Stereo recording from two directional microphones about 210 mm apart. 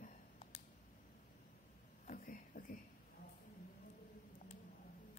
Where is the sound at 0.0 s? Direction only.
35° left (ahead or behind).